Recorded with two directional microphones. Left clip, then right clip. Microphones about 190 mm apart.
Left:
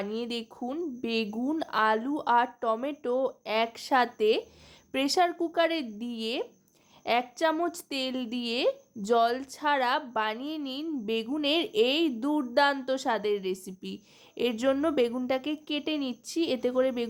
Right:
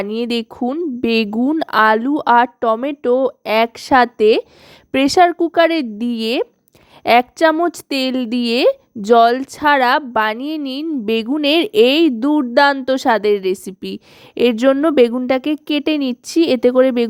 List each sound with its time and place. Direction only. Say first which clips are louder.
0.0 s a woman's voice: right 13 dB; 40° right (ahead or behind)